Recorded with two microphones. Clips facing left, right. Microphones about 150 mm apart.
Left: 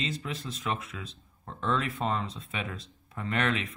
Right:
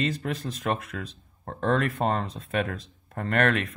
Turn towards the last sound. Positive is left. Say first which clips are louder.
# right 5 dB
turn(degrees=-55)  # may be behind; listen again after turning